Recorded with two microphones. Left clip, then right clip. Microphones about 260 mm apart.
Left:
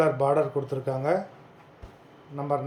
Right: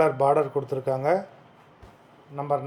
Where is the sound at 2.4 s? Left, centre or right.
Centre.